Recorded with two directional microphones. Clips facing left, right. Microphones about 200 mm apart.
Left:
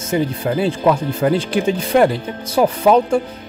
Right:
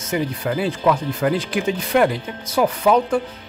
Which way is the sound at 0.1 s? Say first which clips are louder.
Left 4 dB; 30° left (ahead or behind).